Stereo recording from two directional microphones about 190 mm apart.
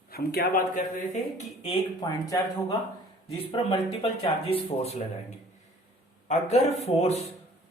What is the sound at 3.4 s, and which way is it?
Speech, 30° left (ahead or behind).